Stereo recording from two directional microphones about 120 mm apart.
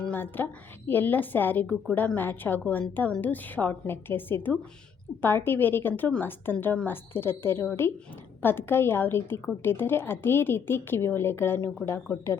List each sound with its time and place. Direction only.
0.0 s a woman's voice: 15° left (ahead or behind)